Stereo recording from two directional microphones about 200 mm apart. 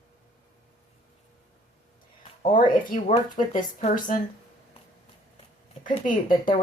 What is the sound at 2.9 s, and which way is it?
Speech, 40° left (ahead or behind).